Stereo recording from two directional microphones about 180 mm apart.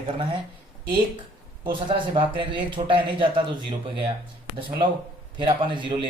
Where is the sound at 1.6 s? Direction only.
30° right (ahead or behind).